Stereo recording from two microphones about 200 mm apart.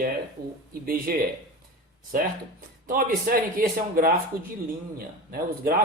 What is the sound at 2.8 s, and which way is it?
Speech, 45° right (ahead or behind).